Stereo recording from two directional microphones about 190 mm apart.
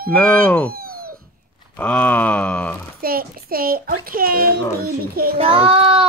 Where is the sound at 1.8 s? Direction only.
5° left (ahead or behind).